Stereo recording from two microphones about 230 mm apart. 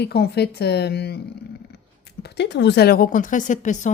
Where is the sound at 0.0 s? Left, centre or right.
Left.